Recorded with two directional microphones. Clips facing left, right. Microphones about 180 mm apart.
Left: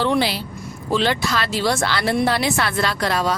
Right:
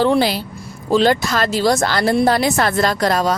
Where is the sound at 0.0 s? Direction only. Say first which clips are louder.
Right 4 dB; 40° right (ahead or behind).